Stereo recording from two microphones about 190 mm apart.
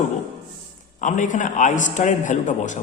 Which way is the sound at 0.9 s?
40° left (ahead or behind).